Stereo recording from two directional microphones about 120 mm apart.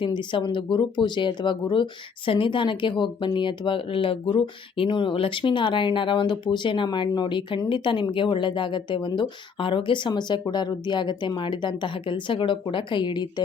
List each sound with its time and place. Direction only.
0.0 s speech: 40° left (ahead or behind)